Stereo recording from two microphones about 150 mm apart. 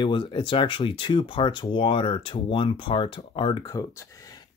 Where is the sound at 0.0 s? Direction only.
35° left (ahead or behind).